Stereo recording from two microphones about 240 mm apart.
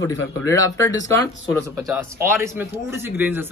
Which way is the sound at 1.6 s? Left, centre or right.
Centre.